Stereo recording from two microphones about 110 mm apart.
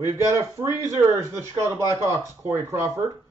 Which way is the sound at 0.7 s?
30° right (ahead or behind).